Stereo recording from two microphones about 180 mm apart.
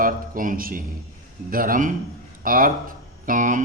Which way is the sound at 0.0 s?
50° right (ahead or behind).